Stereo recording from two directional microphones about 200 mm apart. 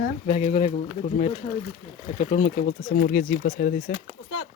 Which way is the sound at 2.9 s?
50° left (ahead or behind).